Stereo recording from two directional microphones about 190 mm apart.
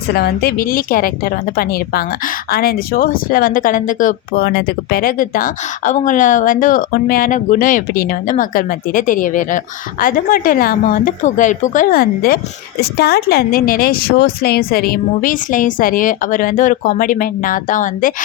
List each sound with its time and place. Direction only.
0.1 s speech: 55° left (ahead or behind)